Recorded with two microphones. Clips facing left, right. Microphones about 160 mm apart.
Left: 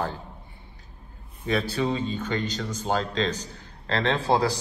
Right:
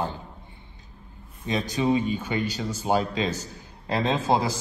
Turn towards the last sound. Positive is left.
turn(degrees=-20)  # may be behind; listen again after turning